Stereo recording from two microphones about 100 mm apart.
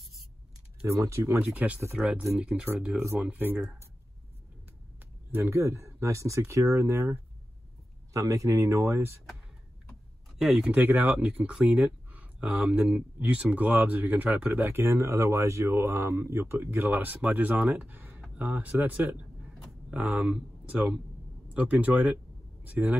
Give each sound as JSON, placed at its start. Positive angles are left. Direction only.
{"t": 0.8, "sound": "speech", "side_deg": -30}
{"t": 1.4, "sound": "speech", "side_deg": -15}
{"t": 5.3, "sound": "speech", "side_deg": -25}
{"t": 10.4, "sound": "speech", "side_deg": -5}
{"t": 17.7, "sound": "a sound", "side_deg": -15}
{"t": 18.3, "sound": "speech", "side_deg": -15}